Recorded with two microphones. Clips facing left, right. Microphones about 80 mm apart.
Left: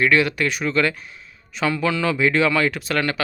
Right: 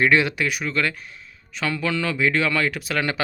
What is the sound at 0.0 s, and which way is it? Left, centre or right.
Speech, right.